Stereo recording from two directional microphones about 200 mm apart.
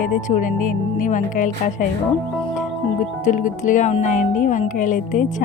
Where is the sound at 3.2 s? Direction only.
40° left (ahead or behind).